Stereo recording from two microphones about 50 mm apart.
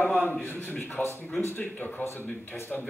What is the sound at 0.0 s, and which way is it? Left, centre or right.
A man's voice, left.